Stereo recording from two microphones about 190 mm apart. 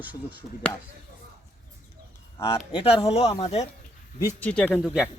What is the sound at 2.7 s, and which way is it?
Speech, 25° left (ahead or behind).